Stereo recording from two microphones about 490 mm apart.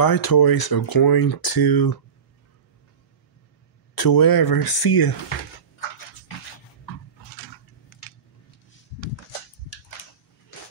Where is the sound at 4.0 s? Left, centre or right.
Left.